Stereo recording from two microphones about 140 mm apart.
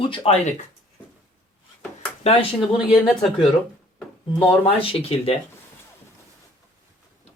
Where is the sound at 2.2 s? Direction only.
40° left (ahead or behind).